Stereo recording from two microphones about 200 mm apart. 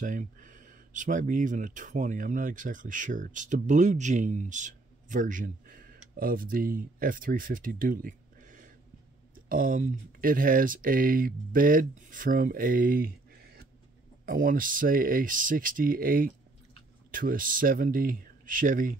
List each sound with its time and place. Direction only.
0.0 s speech: 40° right (ahead or behind)